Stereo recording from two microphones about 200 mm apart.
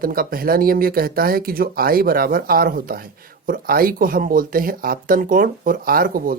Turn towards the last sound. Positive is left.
turn(degrees=-45)  # may be behind; listen again after turning